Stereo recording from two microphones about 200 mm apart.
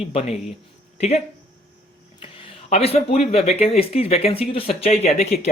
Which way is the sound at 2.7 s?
30° left (ahead or behind).